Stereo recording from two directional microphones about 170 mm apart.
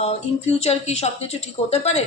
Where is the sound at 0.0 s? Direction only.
40° left (ahead or behind).